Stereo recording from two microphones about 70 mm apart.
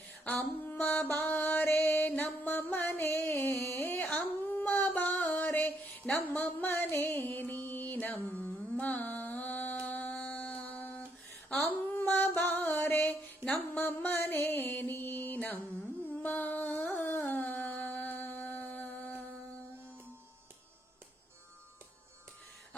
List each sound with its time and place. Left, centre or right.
0.3 s music: left
3.2 s singing: left
5.5 s music: left
6.7 s music: left
11.5 s a sound: left
12.7 s music: left
17.2 s humming: left